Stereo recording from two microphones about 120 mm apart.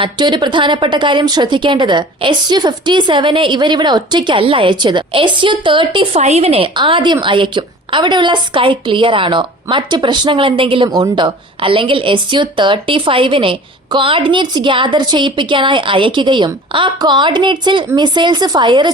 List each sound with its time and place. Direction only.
0.0 s speech: 40° right (ahead or behind)
6.1 s a woman's voice: 65° right (ahead or behind); by 18.9 s 40° right (ahead or behind)